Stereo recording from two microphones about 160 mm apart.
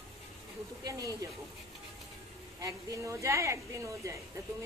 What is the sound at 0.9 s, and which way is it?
Speech, 20° right (ahead or behind).